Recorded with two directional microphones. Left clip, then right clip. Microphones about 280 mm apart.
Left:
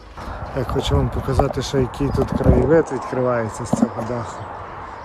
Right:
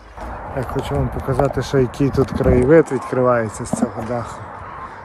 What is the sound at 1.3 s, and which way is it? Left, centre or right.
Speech, centre.